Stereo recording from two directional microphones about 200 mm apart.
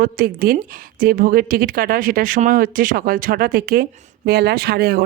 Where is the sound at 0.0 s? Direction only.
45° right (ahead or behind).